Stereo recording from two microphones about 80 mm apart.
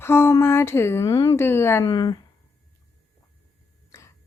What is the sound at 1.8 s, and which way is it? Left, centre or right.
Speech, left.